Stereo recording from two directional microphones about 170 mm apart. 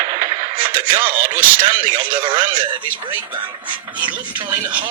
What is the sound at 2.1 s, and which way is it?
Speech, 30° right (ahead or behind).